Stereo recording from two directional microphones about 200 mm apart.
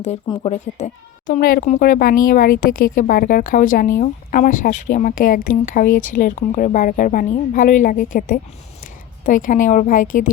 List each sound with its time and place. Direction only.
0.3 s speech: 25° left (ahead or behind)
0.7 s a woman's voice: 35° left (ahead or behind)
1.3 s a woman's voice: 45° left (ahead or behind)